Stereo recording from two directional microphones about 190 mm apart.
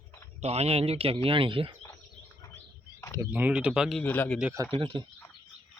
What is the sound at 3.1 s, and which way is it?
Speech, 10° right (ahead or behind).